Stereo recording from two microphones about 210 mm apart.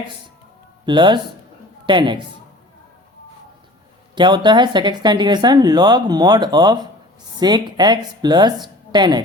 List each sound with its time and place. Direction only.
0.9 s speech: 20° right (ahead or behind)
4.1 s a woman's voice: 20° right (ahead or behind)